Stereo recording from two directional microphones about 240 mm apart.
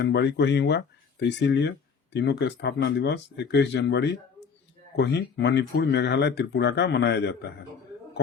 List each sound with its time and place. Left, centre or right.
0.0 s speech: left